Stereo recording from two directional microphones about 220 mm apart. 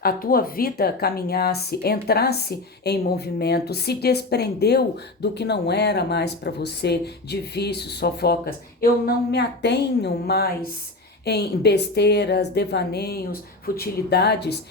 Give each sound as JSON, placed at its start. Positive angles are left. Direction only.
{"t": 0.0, "sound": "speech", "side_deg": 40}